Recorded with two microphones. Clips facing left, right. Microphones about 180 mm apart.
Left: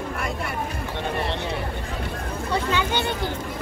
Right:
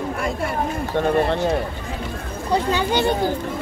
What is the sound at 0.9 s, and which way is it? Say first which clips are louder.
Speech: right 9 dB; 45° right (ahead or behind).